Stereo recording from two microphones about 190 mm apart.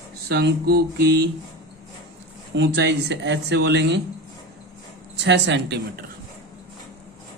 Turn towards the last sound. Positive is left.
turn(degrees=-60)  # may be behind; listen again after turning